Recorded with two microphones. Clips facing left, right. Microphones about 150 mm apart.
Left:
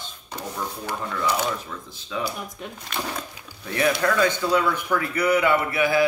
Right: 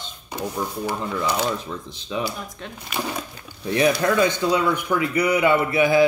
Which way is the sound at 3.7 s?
20° right (ahead or behind).